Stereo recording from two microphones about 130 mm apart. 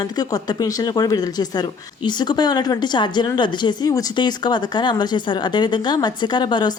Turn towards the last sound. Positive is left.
turn(degrees=35)  # may be behind; listen again after turning